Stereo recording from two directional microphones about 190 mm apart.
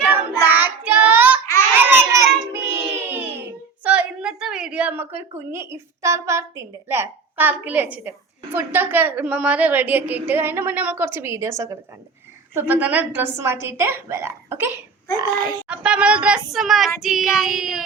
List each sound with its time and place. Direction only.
0.0 s child singing: 10° right (ahead or behind)
2.5 s a sound: 10° right (ahead or behind)
3.8 s a woman's voice: 5° right (ahead or behind)
15.6 s speech: 5° right (ahead or behind)